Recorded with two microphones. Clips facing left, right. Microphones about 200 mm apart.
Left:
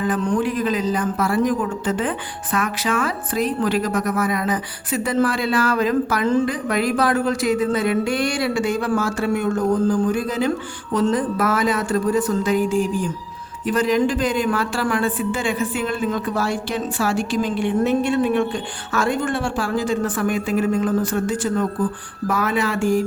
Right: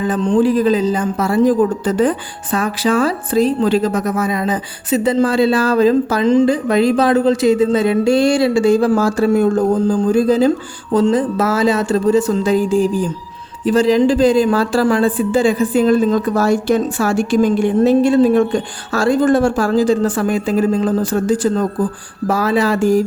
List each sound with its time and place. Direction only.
0.0 s speech: 20° right (ahead or behind)
0.3 s a woman's voice: 30° right (ahead or behind)
1.9 s a woman's voice: 40° right (ahead or behind)